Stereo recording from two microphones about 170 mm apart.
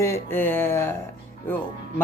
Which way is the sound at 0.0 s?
15° left (ahead or behind).